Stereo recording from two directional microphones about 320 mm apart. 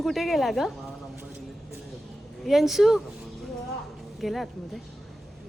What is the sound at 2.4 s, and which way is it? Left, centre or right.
Speech, centre.